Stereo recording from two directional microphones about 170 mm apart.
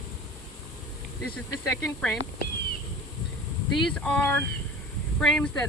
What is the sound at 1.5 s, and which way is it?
Speech, 15° left (ahead or behind).